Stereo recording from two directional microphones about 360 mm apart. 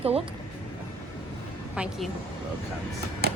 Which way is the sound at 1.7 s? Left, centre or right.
Centre.